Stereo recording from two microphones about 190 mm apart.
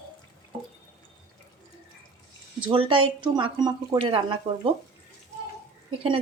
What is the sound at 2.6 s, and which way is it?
Speech, 25° right (ahead or behind).